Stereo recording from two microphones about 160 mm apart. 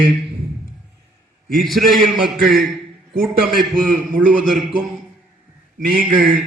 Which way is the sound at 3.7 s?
60° right (ahead or behind).